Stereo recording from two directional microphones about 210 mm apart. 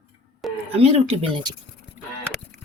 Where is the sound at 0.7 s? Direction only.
25° right (ahead or behind).